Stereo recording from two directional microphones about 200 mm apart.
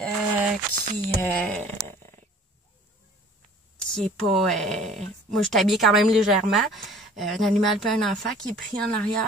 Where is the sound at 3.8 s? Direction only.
Centre (ahead or behind).